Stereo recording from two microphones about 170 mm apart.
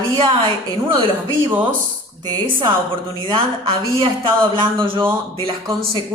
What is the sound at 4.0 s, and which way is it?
Speech, 30° right (ahead or behind).